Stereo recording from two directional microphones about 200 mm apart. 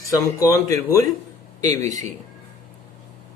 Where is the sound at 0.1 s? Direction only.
15° left (ahead or behind).